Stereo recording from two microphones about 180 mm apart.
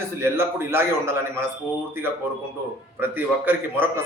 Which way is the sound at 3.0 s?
10° right (ahead or behind).